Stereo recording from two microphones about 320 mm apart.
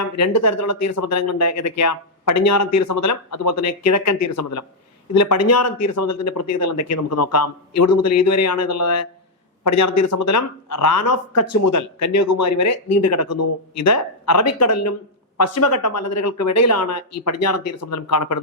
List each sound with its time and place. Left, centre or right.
0.2 s speech: left